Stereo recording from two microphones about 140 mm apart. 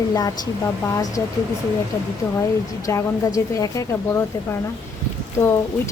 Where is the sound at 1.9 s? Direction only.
20° left (ahead or behind).